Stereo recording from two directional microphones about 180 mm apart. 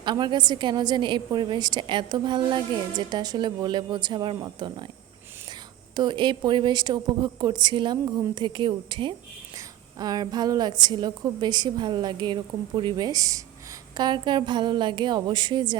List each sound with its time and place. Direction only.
0.0 s a woman's voice: 25° right (ahead or behind)
6.0 s a woman's voice: 25° right (ahead or behind)